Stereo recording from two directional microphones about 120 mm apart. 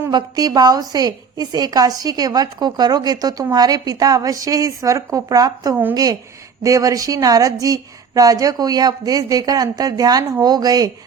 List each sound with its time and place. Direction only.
0.1 s a woman's voice: 35° right (ahead or behind)